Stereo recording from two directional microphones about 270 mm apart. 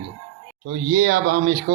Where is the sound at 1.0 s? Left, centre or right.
Right.